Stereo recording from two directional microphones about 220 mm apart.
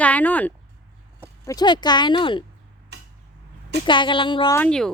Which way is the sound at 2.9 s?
50° right (ahead or behind).